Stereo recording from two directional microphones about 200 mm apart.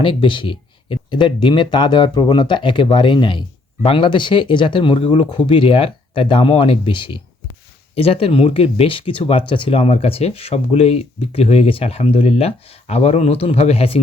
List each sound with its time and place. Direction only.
0.0 s speech: 25° left (ahead or behind)